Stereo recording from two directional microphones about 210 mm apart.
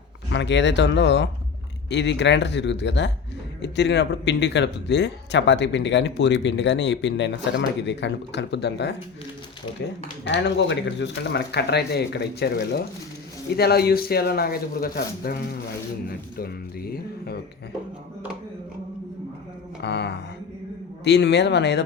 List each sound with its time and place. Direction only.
0.3 s speech: 60° left (ahead or behind)
10.2 s speech: 55° left (ahead or behind)
19.8 s speech: 55° left (ahead or behind)